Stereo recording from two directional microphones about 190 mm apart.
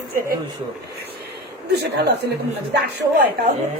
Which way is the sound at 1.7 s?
60° right (ahead or behind).